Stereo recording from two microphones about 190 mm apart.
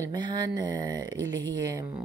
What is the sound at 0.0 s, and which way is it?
Speech, 25° right (ahead or behind).